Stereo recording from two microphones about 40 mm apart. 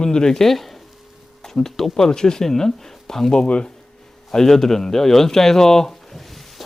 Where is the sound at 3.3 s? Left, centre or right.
Left.